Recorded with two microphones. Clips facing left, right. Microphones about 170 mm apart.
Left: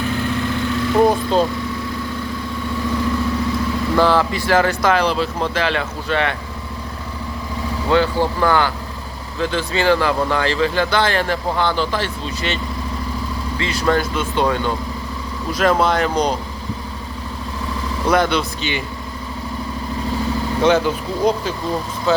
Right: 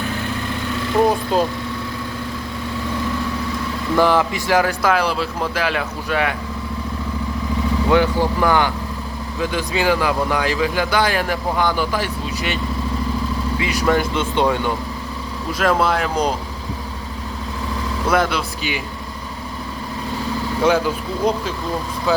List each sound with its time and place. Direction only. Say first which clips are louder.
0.9 s speech: left 1 dB; 5° right (ahead or behind)
3.9 s speech: even; 15° right (ahead or behind)
7.9 s speech: left 1 dB; 15° right (ahead or behind)
13.6 s speech: even; 15° right (ahead or behind)
15.5 s speech: left 2 dB; 5° right (ahead or behind)
18.1 s speech: left 2 dB; 5° right (ahead or behind)
20.6 s speech: left 1 dB; 5° right (ahead or behind)